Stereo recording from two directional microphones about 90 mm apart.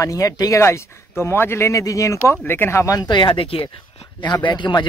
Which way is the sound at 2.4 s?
25° left (ahead or behind).